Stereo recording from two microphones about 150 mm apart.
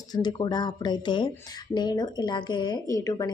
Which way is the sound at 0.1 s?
30° left (ahead or behind).